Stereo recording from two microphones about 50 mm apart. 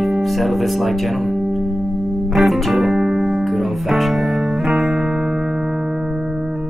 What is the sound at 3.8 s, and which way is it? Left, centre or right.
Speech, centre.